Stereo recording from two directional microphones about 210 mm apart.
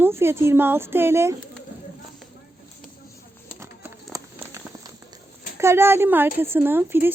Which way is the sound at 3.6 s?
10° right (ahead or behind).